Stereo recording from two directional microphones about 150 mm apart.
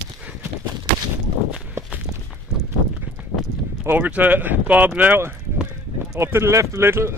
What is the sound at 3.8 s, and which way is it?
Speech, 10° right (ahead or behind).